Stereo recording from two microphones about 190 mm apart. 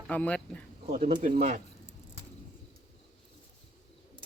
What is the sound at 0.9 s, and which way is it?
Speech, 35° right (ahead or behind).